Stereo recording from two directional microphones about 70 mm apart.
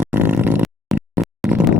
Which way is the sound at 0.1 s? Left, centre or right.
Right.